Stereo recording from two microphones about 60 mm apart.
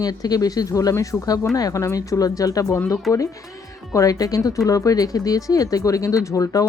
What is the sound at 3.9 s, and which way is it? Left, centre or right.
Speech, left.